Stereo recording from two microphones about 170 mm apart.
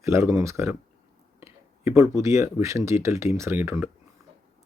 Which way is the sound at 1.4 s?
15° right (ahead or behind).